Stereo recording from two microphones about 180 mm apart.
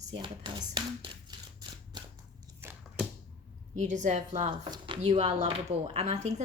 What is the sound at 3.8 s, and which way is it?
Speech, 40° right (ahead or behind).